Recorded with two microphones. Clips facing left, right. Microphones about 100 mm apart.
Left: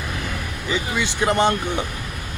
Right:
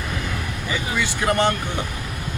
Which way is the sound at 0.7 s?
20° left (ahead or behind).